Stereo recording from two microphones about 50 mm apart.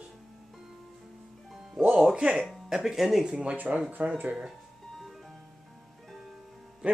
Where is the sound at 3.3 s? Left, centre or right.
Right.